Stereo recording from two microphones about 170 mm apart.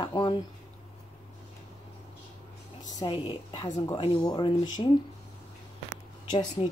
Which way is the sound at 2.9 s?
30° left (ahead or behind).